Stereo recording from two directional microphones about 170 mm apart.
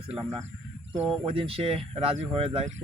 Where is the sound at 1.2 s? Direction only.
30° right (ahead or behind).